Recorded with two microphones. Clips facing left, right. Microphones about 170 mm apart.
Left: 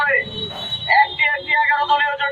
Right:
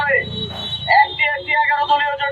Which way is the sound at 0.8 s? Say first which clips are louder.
Right 2 dB; 40° right (ahead or behind).